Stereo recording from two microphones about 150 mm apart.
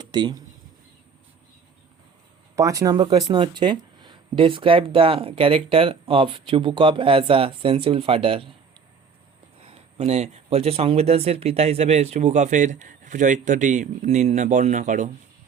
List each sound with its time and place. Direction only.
0.0 s speech: 30° right (ahead or behind)
2.6 s speech: 20° right (ahead or behind); by 8.4 s 35° right (ahead or behind)
9.6 s speech: 40° right (ahead or behind); by 15.1 s 55° right (ahead or behind)